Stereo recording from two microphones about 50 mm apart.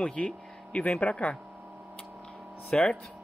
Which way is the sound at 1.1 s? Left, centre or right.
Left.